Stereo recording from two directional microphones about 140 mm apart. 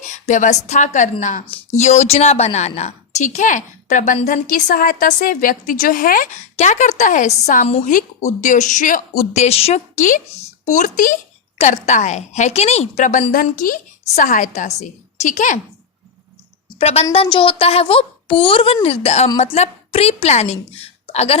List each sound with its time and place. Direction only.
0.0 s a woman's voice: 60° left (ahead or behind)
1.5 s a woman's voice: 45° left (ahead or behind); by 6.4 s 85° left
6.6 s a woman's voice: 55° left (ahead or behind)
11.5 s a woman's voice: 55° left (ahead or behind); by 13.7 s 75° left (ahead or behind)
14.2 s a woman's voice: 60° left (ahead or behind)
16.6 s a woman's voice: 45° left (ahead or behind)